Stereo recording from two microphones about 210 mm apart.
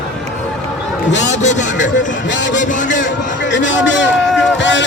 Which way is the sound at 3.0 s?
60° left (ahead or behind).